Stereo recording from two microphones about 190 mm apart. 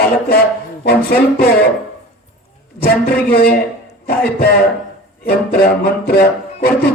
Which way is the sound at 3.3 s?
55° left (ahead or behind).